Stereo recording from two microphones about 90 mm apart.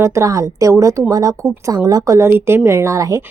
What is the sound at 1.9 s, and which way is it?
Speech, 40° right (ahead or behind).